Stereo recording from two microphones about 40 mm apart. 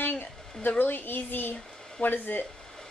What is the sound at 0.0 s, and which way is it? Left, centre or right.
A woman's voice, left.